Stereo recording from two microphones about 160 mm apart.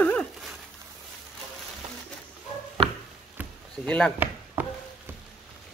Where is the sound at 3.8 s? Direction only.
10° left (ahead or behind).